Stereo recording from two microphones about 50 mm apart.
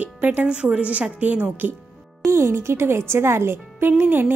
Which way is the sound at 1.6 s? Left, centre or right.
Right.